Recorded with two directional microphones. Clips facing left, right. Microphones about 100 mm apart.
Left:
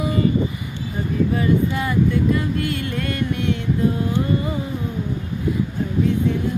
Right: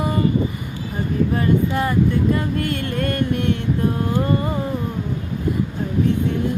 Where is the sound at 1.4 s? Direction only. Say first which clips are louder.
Right 1 dB; 45° right (ahead or behind).